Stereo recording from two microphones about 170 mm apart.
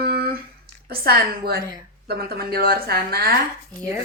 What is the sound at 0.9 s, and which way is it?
Speech, 65° right (ahead or behind).